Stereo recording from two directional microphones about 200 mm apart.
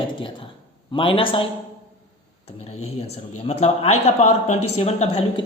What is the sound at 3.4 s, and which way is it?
A woman's voice, 35° left (ahead or behind).